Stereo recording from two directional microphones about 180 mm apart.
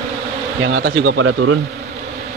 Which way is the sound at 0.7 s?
90° right.